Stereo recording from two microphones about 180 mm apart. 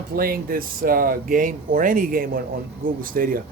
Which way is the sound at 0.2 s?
55° right (ahead or behind).